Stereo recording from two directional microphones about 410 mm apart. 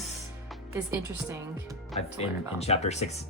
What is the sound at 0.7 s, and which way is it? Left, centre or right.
A woman's voice, centre.